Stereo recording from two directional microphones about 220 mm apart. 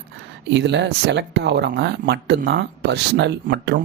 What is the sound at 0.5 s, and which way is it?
Speech, 50° right (ahead or behind).